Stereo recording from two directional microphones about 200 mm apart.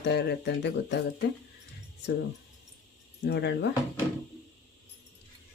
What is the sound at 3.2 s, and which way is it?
Speech, 60° left (ahead or behind).